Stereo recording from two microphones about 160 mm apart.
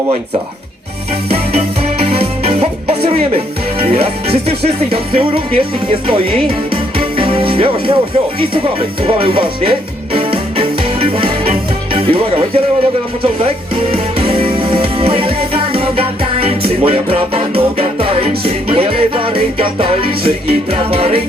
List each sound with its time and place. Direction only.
1.3 s music: 40° right (ahead or behind)
9.0 s music: 35° right (ahead or behind)